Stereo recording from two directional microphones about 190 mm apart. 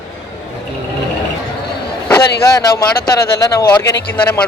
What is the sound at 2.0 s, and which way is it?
Speech, 20° left (ahead or behind).